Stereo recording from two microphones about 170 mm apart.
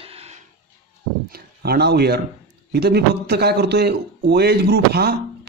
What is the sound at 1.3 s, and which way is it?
A man's voice, 65° right (ahead or behind).